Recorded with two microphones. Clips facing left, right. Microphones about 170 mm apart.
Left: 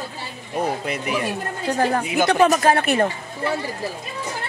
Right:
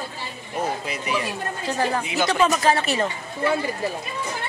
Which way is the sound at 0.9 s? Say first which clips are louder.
Left 3 dB; 55° left (ahead or behind).